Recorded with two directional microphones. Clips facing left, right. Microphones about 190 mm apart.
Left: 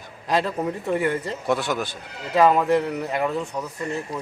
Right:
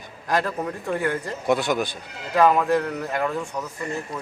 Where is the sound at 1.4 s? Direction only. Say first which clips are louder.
Right 3 dB; 15° right (ahead or behind).